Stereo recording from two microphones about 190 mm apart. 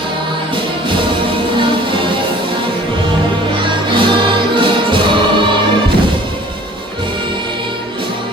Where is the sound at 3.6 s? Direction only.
25° right (ahead or behind).